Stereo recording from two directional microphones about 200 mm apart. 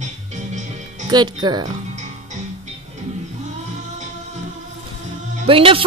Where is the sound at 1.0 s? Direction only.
20° right (ahead or behind).